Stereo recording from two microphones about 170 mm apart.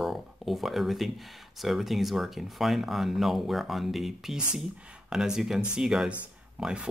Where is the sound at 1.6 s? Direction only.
Centre (ahead or behind).